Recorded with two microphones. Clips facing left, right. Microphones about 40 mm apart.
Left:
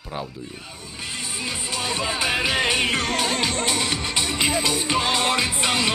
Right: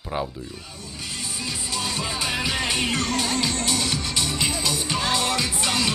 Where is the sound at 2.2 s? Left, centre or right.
Centre.